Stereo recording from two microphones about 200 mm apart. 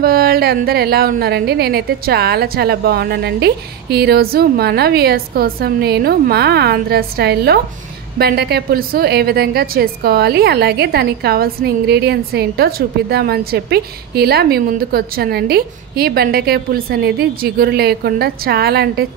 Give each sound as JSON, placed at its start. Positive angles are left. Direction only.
{"t": 0.0, "sound": "a woman's voice", "side_deg": -50}